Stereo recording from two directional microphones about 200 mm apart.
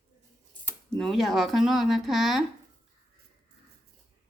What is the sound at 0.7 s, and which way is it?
Speech, 5° left (ahead or behind).